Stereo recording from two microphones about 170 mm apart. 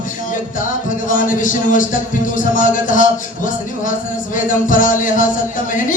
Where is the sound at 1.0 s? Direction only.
50° left (ahead or behind).